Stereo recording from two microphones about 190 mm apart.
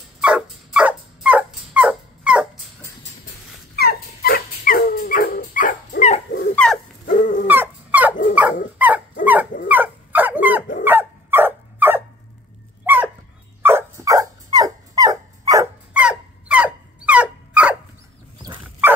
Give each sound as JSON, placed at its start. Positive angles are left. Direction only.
{"t": 0.2, "sound": "dog", "side_deg": -5}
{"t": 3.7, "sound": "dog", "side_deg": 55}
{"t": 6.5, "sound": "dog", "side_deg": 5}
{"t": 7.1, "sound": "dog", "side_deg": 45}
{"t": 7.4, "sound": "dog", "side_deg": -10}
{"t": 15.9, "sound": "a sound", "side_deg": -5}
{"t": 18.6, "sound": "dog", "side_deg": -10}